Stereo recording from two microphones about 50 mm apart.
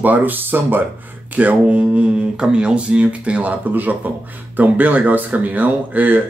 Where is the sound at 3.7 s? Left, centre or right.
Right.